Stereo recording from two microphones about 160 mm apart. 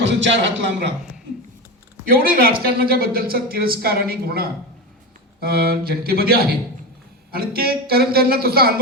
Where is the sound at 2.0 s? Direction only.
65° right (ahead or behind).